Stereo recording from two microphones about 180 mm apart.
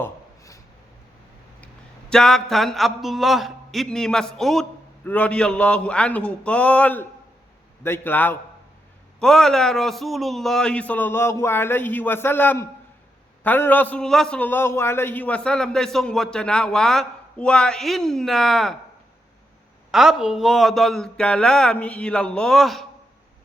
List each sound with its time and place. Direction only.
0.0 s a sound: 15° left (ahead or behind)
1.6 s a man's voice: 5° left (ahead or behind)
19.9 s a man's voice: centre (ahead or behind)